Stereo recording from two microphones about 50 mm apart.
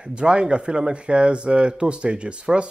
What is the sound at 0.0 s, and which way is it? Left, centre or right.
Speech, right.